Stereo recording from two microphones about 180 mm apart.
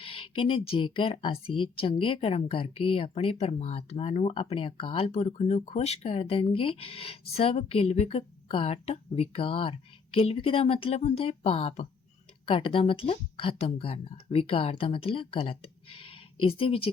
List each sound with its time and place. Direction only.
0.0 s speech: 30° left (ahead or behind)